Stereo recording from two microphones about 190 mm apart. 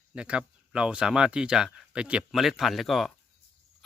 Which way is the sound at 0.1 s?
5° right (ahead or behind).